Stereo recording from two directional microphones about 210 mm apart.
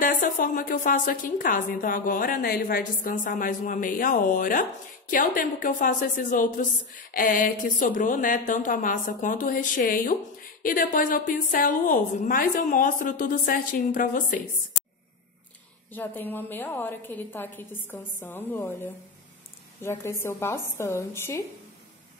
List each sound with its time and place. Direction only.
0.0 s a woman's voice: 40° left (ahead or behind)
15.9 s a woman's voice: 10° left (ahead or behind)